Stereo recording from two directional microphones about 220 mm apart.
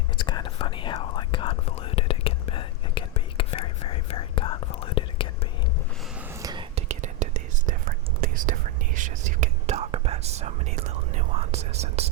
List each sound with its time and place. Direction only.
0.2 s whispering: 20° left (ahead or behind)
6.4 s whispering: 20° right (ahead or behind)